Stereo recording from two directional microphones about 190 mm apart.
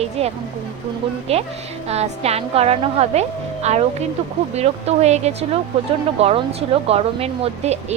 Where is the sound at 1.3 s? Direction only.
35° right (ahead or behind).